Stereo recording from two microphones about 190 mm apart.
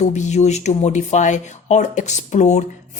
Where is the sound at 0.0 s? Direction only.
40° left (ahead or behind).